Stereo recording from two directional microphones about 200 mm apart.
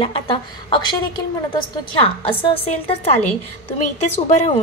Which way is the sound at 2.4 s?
30° left (ahead or behind).